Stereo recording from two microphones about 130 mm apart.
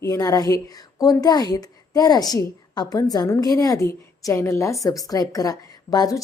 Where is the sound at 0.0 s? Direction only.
25° left (ahead or behind).